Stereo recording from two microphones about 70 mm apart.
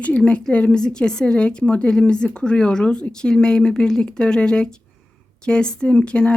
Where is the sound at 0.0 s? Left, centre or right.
Centre.